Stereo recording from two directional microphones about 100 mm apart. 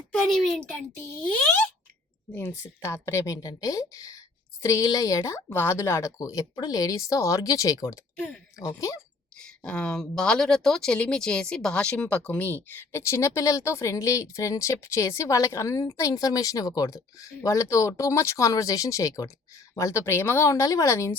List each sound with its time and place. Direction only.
0.1 s a woman's voice: 5° left (ahead or behind)
2.3 s speech: 20° left (ahead or behind)
9.4 s speech: 10° left (ahead or behind); by 21.2 s 30° left (ahead or behind)